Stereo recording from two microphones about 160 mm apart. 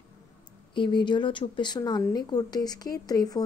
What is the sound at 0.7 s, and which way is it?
Speech, 30° left (ahead or behind).